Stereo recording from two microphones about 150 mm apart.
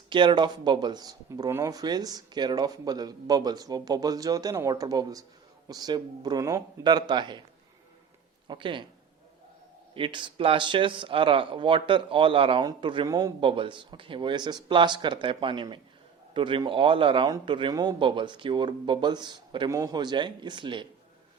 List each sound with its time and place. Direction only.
0.1 s speech: 30° right (ahead or behind)
8.4 s speech: 35° right (ahead or behind)
9.9 s speech: 35° right (ahead or behind)